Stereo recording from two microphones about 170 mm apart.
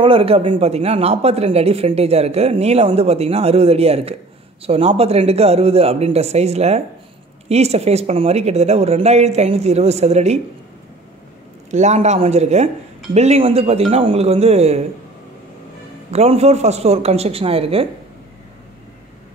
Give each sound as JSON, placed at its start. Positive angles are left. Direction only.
{"t": 0.0, "sound": "a woman's voice", "side_deg": -30}
{"t": 11.7, "sound": "a woman's voice", "side_deg": -40}
{"t": 16.1, "sound": "a woman's voice", "side_deg": -40}